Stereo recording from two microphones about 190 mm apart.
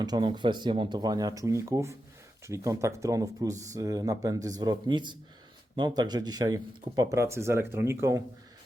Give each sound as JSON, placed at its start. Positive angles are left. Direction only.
{"t": 0.0, "sound": "speech", "side_deg": -20}